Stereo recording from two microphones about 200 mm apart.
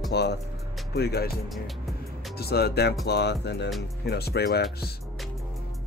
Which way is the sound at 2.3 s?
50° left (ahead or behind).